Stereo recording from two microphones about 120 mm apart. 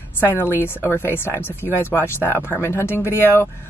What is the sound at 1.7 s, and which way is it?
Speech, 15° left (ahead or behind).